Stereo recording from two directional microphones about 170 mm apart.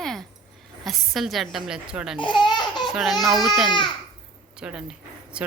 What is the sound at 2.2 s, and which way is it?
Laughter, 30° left (ahead or behind).